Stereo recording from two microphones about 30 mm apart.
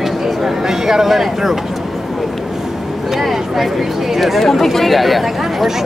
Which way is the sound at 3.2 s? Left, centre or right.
Centre.